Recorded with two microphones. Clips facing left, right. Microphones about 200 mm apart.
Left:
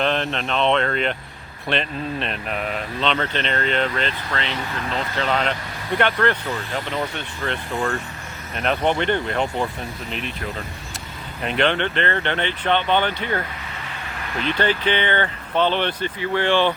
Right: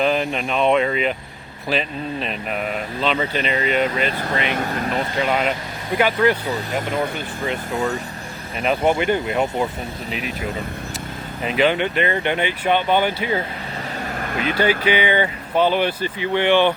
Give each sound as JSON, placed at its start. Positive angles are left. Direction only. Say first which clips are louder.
{"t": 0.0, "sound": "speech", "louder": "right 3 dB", "side_deg": -5}
{"t": 4.4, "sound": "speech", "louder": "right 5 dB", "side_deg": -50}
{"t": 4.9, "sound": "speech", "louder": "right 1 dB", "side_deg": -10}
{"t": 11.4, "sound": "speech", "louder": "right 2 dB", "side_deg": -5}
{"t": 14.2, "sound": "vehicle", "louder": "right 1 dB", "side_deg": -50}
{"t": 14.6, "sound": "speech", "louder": "right 3 dB", "side_deg": -10}
{"t": 16.3, "sound": "speech", "louder": "right 3 dB", "side_deg": -20}